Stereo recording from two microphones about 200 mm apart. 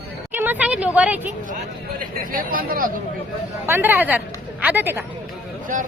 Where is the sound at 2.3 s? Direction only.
45° right (ahead or behind).